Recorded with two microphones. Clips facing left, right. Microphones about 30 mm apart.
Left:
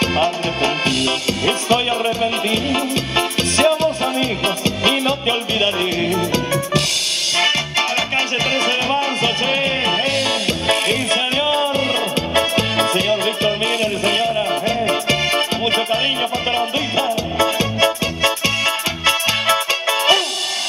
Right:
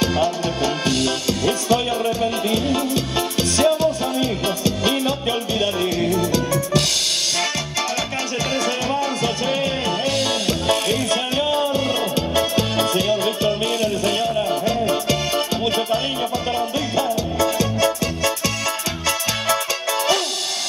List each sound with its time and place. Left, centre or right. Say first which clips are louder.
0.0 s music: left 2 dB; left
7.3 s music: left 6 dB; left